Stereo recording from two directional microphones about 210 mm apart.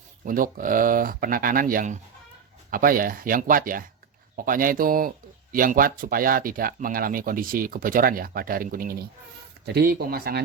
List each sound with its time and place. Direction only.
0.3 s speech: 40° right (ahead or behind)